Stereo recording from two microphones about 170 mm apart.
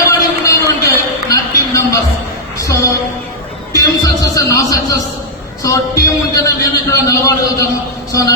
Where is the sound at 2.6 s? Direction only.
20° left (ahead or behind).